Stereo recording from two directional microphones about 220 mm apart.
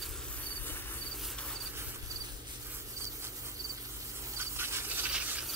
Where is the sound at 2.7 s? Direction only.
10° right (ahead or behind).